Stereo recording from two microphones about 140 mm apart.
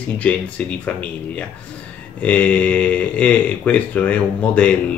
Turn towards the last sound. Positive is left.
turn(degrees=10)  # may be behind; listen again after turning